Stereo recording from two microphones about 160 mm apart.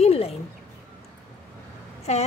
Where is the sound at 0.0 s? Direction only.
40° left (ahead or behind).